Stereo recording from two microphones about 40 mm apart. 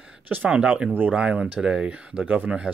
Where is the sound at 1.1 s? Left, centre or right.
Right.